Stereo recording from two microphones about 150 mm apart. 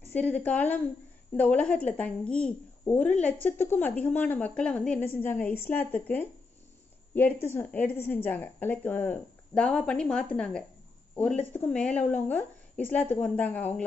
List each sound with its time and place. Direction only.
0.1 s a woman's voice: 10° left (ahead or behind)